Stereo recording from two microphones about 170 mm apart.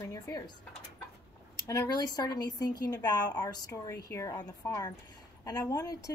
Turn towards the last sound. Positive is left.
turn(degrees=20)  # may be behind; listen again after turning